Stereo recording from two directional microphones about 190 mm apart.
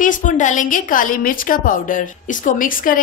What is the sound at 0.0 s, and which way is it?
A woman's voice, 45° left (ahead or behind).